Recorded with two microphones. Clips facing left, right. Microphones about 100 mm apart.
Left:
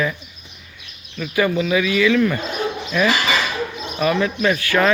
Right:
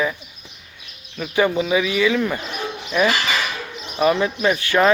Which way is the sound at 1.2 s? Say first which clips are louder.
Even; 25° right (ahead or behind).